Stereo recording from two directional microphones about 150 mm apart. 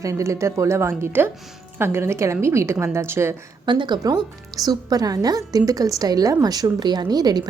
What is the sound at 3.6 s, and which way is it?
A woman's voice, 30° right (ahead or behind).